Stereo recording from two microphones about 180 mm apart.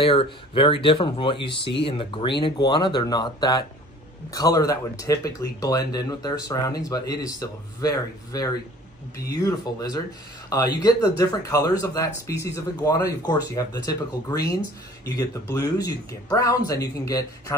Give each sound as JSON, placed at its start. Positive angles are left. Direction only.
{"t": 0.0, "sound": "speech", "side_deg": 30}